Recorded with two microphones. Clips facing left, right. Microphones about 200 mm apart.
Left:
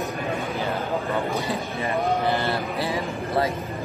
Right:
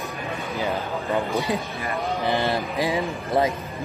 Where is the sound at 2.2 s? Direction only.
15° right (ahead or behind).